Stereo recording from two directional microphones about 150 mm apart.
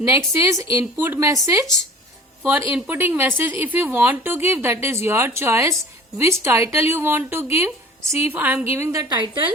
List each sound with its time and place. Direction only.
0.0 s a woman's voice: 20° right (ahead or behind)